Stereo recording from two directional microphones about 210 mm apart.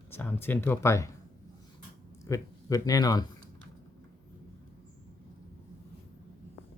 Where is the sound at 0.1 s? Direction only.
10° left (ahead or behind).